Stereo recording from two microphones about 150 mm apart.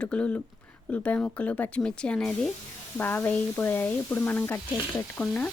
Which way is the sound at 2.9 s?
15° left (ahead or behind).